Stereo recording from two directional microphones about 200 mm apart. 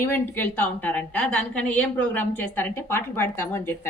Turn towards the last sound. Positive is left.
turn(degrees=10)  # may be behind; listen again after turning